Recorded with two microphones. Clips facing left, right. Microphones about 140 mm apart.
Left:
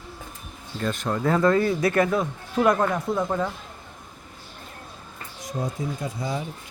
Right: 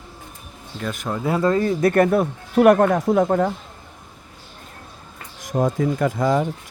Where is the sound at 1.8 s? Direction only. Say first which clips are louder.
Right 5 dB; 50° right (ahead or behind); by 3.2 s 80° right.